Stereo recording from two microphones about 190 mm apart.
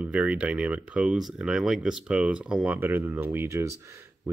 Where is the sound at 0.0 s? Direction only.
5° right (ahead or behind).